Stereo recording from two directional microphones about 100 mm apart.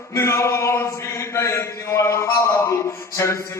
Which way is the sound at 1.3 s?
30° left (ahead or behind).